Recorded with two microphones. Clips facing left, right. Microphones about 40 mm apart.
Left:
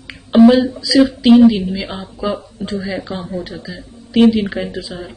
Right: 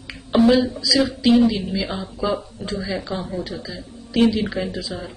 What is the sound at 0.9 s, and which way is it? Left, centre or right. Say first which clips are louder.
Speech: left 7 dB; centre.